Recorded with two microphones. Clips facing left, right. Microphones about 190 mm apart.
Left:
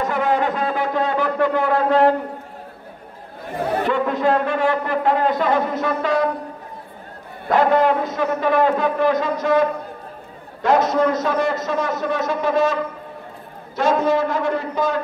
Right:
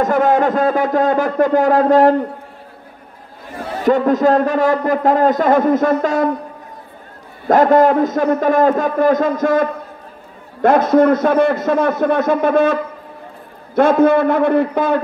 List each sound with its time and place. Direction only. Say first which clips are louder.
0.0 s a sound: right 6 dB; 45° right (ahead or behind)
3.8 s a man's voice: right 9 dB; 40° right (ahead or behind)
7.4 s a man's voice: right 5 dB; 45° right (ahead or behind)
13.7 s a man's voice: right 6 dB; 55° right (ahead or behind)